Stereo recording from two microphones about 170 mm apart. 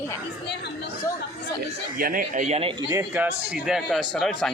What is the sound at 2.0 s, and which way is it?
Speech, 55° right (ahead or behind).